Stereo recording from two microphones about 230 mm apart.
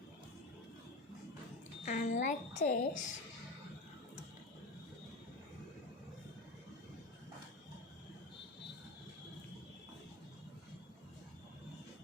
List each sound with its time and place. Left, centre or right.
1.8 s a woman's voice: left